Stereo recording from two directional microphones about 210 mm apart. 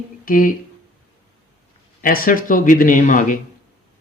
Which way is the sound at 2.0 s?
45° left (ahead or behind).